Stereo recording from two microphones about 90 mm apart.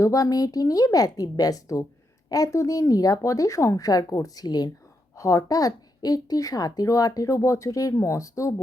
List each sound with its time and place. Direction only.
0.0 s a woman's voice: 40° left (ahead or behind)